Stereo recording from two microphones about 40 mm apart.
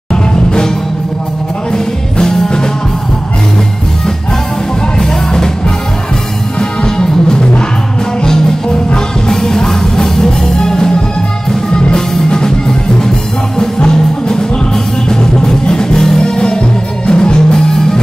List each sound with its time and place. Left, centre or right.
0.1 s music: centre
1.7 s music: centre
4.9 s music: centre
6.6 s music: centre
8.9 s music: centre
13.6 s music: centre